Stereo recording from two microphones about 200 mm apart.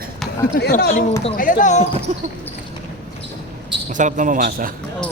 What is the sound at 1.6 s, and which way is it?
Speech, 35° left (ahead or behind).